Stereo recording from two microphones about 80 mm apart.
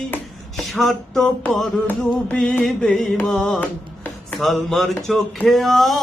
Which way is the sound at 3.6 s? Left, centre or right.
Left.